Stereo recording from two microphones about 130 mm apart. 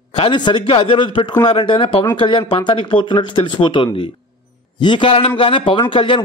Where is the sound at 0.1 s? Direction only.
40° left (ahead or behind).